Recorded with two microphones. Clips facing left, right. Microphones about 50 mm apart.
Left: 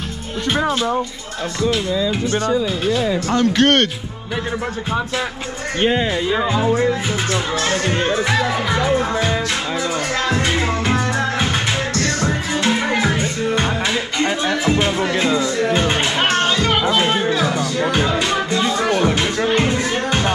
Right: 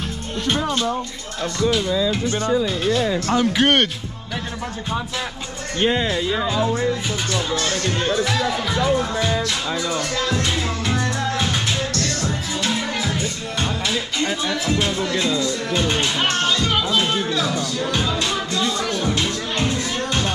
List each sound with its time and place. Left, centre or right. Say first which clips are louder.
0.7 s speech: left 3 dB; centre
2.9 s speech: left 1 dB; centre
3.3 s speech: left 3 dB; centre
5.8 s speech: left 2 dB; centre
7.7 s music: left 4 dB; left
12.9 s music: left 6 dB; left